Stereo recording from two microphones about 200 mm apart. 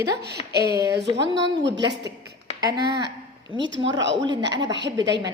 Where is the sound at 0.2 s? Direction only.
55° right (ahead or behind).